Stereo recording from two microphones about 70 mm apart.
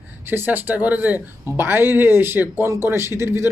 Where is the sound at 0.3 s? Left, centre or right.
Right.